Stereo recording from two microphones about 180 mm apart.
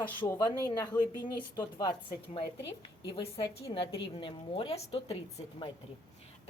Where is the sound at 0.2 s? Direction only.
20° left (ahead or behind).